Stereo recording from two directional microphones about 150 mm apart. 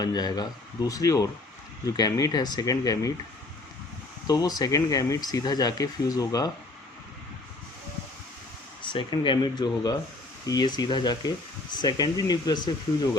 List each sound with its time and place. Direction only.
0.0 s speech: 25° left (ahead or behind)
4.3 s speech: 25° left (ahead or behind)
8.8 s speech: 35° left (ahead or behind)